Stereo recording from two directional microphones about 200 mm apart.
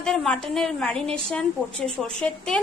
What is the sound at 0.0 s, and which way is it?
A woman's voice, centre (ahead or behind).